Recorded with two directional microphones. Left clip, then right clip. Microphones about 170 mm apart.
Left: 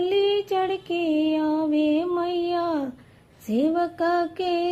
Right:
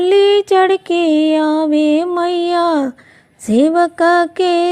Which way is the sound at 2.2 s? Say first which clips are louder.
Right 10 dB; 40° right (ahead or behind).